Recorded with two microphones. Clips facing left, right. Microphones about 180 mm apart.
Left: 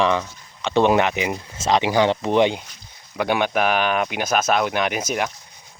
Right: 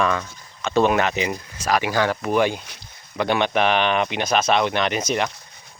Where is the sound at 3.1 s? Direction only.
10° left (ahead or behind).